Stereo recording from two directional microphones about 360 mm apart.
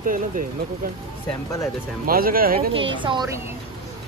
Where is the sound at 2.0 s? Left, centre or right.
Right.